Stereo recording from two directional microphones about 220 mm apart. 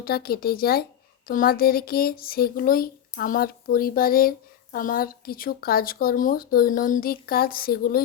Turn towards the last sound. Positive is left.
turn(degrees=45)  # may be behind; listen again after turning